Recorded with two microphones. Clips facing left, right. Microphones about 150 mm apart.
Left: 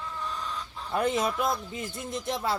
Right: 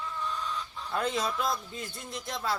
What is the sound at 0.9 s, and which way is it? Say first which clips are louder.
A man's voice: left 4 dB; 20° left (ahead or behind).